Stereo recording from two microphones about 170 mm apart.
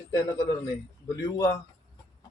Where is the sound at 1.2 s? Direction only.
20° left (ahead or behind).